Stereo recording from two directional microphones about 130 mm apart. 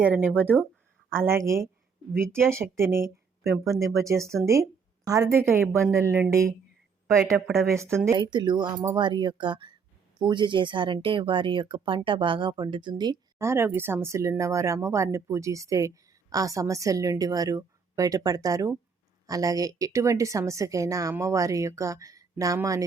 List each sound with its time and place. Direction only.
0.0 s speech: 10° right (ahead or behind)
4.4 s a woman's voice: 25° right (ahead or behind)
7.4 s speech: centre (ahead or behind)
7.7 s speech: 20° right (ahead or behind)
8.1 s speech: 35° right (ahead or behind)
13.4 s speech: 20° right (ahead or behind)